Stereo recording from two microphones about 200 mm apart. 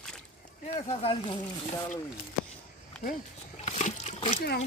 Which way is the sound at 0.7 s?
30° left (ahead or behind).